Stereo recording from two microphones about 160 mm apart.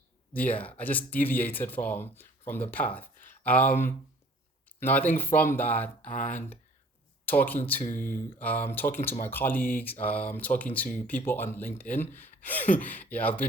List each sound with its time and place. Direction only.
0.3 s speech: 10° left (ahead or behind)
6.1 s speech: 55° left (ahead or behind)
7.3 s speech: 10° left (ahead or behind)